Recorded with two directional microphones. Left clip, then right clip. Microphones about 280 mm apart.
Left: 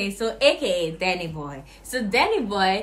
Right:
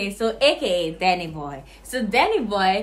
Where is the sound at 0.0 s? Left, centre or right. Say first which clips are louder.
Right 1 dB; centre.